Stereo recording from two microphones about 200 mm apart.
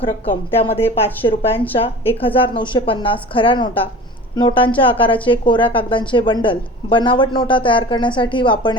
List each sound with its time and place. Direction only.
0.3 s a woman's voice: 30° left (ahead or behind)